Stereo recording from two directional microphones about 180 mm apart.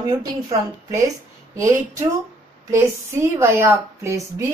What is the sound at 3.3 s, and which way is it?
Speech, 15° right (ahead or behind).